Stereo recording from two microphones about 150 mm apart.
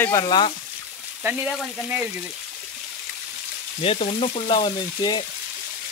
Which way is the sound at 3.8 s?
40° left (ahead or behind).